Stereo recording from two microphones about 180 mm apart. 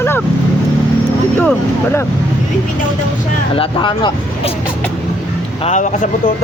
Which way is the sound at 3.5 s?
30° left (ahead or behind).